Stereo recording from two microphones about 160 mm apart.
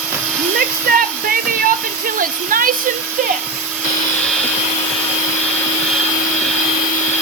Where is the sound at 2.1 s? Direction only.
60° right (ahead or behind).